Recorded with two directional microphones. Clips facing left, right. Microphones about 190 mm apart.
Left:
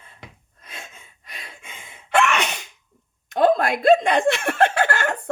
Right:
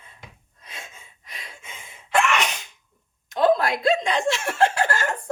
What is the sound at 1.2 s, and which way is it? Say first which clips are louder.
Gasp: left 1 dB; 60° left (ahead or behind).